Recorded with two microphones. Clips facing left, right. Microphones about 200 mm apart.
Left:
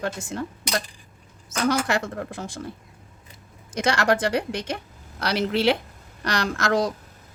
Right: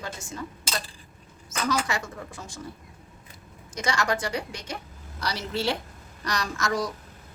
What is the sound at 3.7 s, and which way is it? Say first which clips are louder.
Speech: left 5 dB; 60° left (ahead or behind).